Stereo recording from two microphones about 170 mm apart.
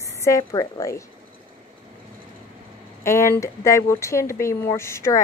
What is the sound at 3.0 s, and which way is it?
Speech, 15° left (ahead or behind).